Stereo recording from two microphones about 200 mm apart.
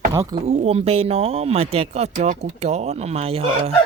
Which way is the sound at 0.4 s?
30° right (ahead or behind).